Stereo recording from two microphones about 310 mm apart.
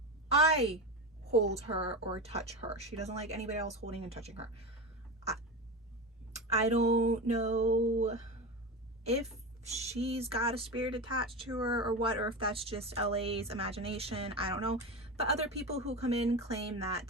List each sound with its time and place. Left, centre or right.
0.3 s a sound: centre
1.2 s speech: right
6.5 s speech: right